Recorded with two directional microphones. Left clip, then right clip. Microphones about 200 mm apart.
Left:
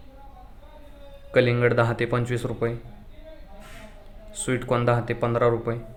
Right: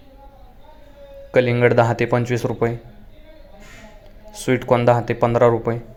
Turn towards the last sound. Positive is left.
turn(degrees=-20)  # may be behind; listen again after turning